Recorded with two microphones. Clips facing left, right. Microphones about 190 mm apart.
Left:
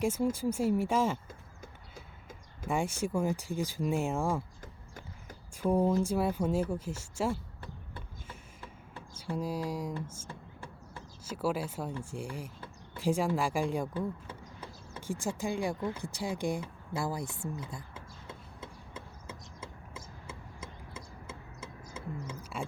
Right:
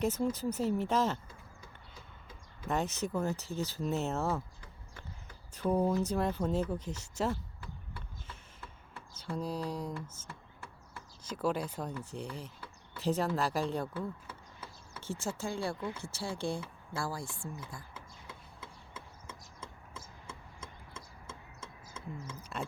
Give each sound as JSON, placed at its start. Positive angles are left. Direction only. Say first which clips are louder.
{"t": 0.0, "sound": "speech", "louder": "left 2 dB", "side_deg": 10}
{"t": 2.6, "sound": "speech", "louder": "left 2 dB", "side_deg": 10}
{"t": 5.7, "sound": "speech", "louder": "left 2 dB", "side_deg": 5}
{"t": 9.1, "sound": "speech", "louder": "left 2 dB", "side_deg": 10}
{"t": 16.1, "sound": "a sound", "louder": "left 2 dB", "side_deg": 15}
{"t": 19.3, "sound": "a sound", "louder": "left 4 dB", "side_deg": 5}